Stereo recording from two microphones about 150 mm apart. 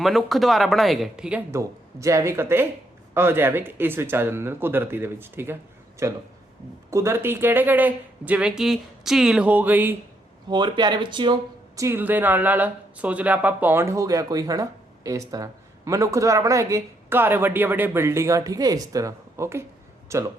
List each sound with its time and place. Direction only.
0.0 s speech: centre (ahead or behind)
1.5 s speech: 20° right (ahead or behind)
10.5 s speech: 30° right (ahead or behind)
11.8 s speech: 15° right (ahead or behind)